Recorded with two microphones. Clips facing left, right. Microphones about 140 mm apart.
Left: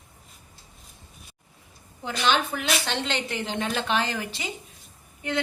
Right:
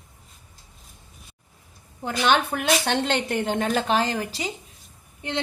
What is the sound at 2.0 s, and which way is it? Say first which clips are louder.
Speech: right 3 dB; 55° right (ahead or behind).